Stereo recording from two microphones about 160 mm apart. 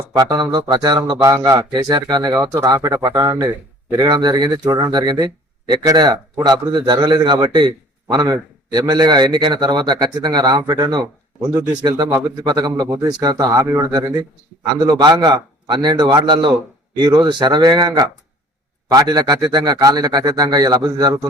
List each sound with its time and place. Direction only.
0.2 s a man's voice: 25° right (ahead or behind)